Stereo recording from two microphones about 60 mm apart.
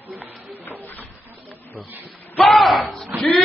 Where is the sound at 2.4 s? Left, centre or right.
Centre.